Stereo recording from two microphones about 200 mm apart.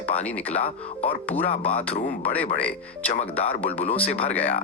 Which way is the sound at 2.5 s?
5° left (ahead or behind).